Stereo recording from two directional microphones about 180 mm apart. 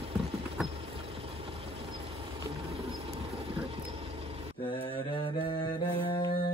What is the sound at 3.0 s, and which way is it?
Vehicle, 35° right (ahead or behind).